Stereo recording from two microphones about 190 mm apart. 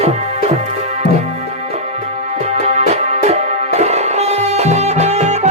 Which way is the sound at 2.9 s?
35° right (ahead or behind).